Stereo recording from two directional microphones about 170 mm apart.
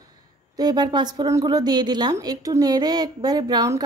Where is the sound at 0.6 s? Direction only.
25° right (ahead or behind).